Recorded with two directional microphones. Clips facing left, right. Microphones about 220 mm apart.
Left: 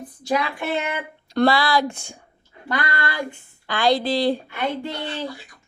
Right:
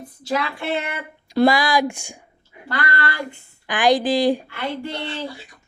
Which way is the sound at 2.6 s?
20° left (ahead or behind).